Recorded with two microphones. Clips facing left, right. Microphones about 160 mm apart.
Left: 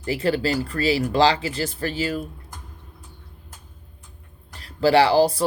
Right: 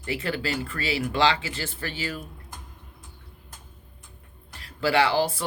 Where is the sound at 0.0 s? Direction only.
35° left (ahead or behind).